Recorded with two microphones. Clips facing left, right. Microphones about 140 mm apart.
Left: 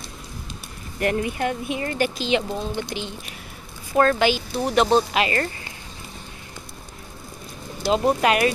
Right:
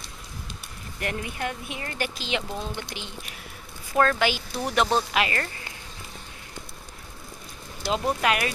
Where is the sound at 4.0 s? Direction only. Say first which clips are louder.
Left 4 dB; 25° left (ahead or behind).